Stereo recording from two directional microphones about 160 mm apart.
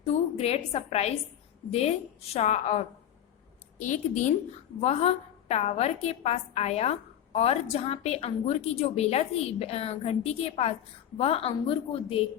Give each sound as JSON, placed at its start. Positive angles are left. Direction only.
{"t": 0.1, "sound": "a woman's voice", "side_deg": 40}
{"t": 2.3, "sound": "a woman's voice", "side_deg": 45}